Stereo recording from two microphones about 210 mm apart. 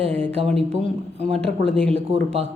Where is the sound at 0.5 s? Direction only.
30° right (ahead or behind).